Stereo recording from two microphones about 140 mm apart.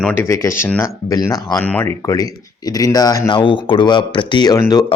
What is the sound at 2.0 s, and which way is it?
Speech, 25° left (ahead or behind).